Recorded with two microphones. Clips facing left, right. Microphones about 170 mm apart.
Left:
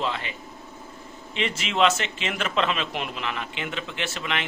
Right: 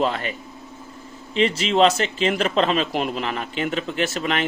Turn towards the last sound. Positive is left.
turn(degrees=-40)  # may be behind; listen again after turning